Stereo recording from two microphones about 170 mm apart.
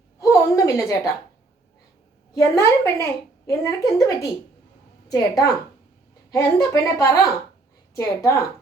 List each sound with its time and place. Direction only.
0.2 s a sound: 20° left (ahead or behind)
2.3 s a woman's voice: 15° left (ahead or behind)
5.3 s a woman's voice: 20° left (ahead or behind)